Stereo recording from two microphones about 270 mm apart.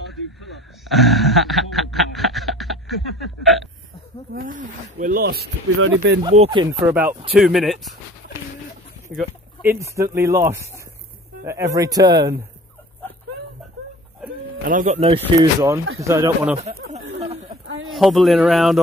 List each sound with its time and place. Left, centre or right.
0.1 s a sound: centre
4.3 s speech: right
6.2 s speech: centre
9.1 s speech: centre
14.6 s speech: right; by 16.5 s centre
16.6 s chatter: right
17.8 s speech: centre